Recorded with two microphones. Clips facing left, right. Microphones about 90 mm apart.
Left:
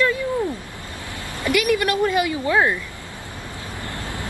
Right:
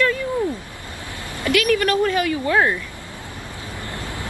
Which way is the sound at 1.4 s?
15° left (ahead or behind).